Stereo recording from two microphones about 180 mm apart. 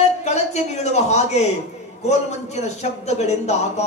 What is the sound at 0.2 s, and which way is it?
Speech, 40° left (ahead or behind).